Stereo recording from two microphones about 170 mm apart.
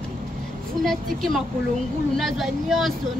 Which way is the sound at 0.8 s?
Centre (ahead or behind).